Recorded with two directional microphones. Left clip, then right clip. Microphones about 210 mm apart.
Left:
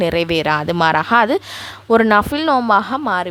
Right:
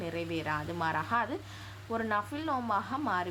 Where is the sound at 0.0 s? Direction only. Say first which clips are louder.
Left 19 dB; 55° left (ahead or behind).